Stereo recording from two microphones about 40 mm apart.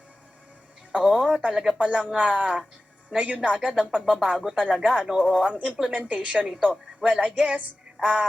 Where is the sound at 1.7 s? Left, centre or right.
Right.